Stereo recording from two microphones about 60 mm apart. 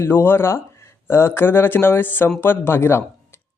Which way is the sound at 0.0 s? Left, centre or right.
Left.